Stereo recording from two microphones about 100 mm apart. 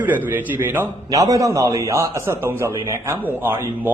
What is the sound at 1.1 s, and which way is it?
A man's voice, 35° right (ahead or behind).